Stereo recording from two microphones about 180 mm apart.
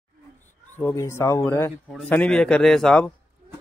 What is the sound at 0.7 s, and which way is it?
A man's voice, 10° left (ahead or behind).